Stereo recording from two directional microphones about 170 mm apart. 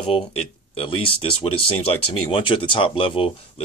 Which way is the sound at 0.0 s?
35° left (ahead or behind).